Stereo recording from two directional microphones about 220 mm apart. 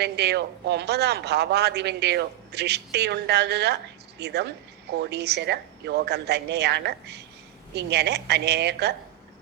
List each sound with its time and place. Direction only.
0.0 s a man's voice: 50° right (ahead or behind)